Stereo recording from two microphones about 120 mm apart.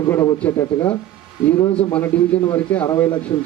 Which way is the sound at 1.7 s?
10° left (ahead or behind).